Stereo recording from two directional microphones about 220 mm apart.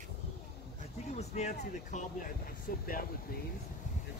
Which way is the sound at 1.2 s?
30° left (ahead or behind).